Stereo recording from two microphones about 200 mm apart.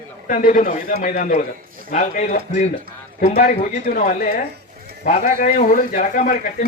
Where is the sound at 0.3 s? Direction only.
40° left (ahead or behind).